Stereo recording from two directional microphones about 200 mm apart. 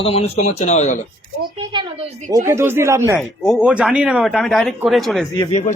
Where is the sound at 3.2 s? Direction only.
Centre (ahead or behind).